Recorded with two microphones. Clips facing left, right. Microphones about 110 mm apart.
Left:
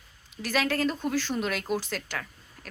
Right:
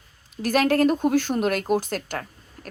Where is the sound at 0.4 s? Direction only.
50° right (ahead or behind).